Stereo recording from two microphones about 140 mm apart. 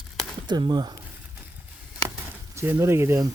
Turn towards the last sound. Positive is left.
turn(degrees=-20)  # may be behind; listen again after turning